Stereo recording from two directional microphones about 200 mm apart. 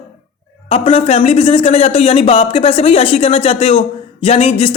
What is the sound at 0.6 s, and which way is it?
Speech, 30° left (ahead or behind).